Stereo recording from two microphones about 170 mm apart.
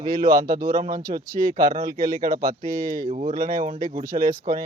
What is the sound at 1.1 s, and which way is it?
Speech, 40° right (ahead or behind).